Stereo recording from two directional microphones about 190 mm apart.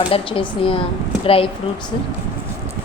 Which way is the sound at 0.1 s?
30° left (ahead or behind).